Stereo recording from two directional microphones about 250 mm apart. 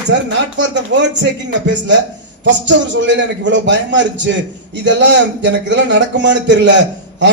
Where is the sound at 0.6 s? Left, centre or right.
Right.